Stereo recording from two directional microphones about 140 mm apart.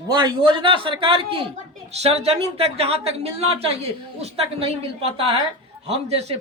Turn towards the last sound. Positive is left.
turn(degrees=-50)  # may be behind; listen again after turning